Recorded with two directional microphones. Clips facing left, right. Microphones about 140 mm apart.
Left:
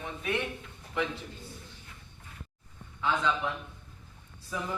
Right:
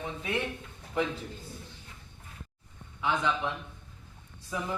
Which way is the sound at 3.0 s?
15° right (ahead or behind).